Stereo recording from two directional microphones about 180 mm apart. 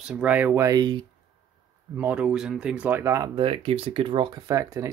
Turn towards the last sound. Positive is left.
turn(degrees=-15)  # may be behind; listen again after turning